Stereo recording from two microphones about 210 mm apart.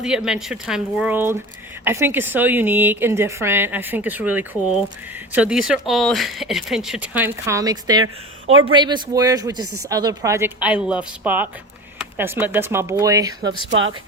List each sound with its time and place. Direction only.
0.0 s a woman's voice: 5° right (ahead or behind); by 13.7 s 20° right (ahead or behind)